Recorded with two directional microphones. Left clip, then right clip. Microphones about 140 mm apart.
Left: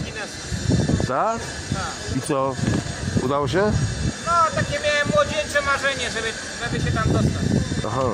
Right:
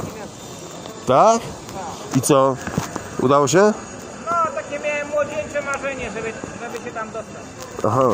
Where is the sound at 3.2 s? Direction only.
20° right (ahead or behind).